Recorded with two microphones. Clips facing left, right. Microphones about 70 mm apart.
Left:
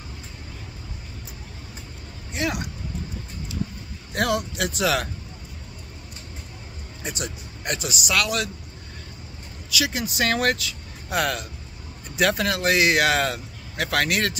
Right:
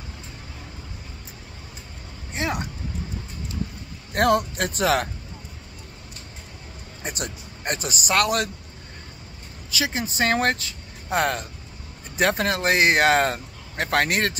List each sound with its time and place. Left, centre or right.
2.3 s speech: right
4.1 s speech: right
7.0 s speech: right
9.7 s speech: right